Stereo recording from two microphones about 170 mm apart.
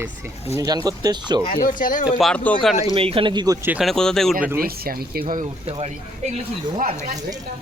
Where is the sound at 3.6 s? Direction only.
5° right (ahead or behind).